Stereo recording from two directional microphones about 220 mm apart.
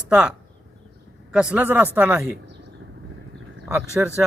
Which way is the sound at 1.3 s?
5° right (ahead or behind).